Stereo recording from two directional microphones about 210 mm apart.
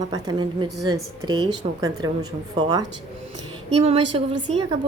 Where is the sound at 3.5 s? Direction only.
30° right (ahead or behind).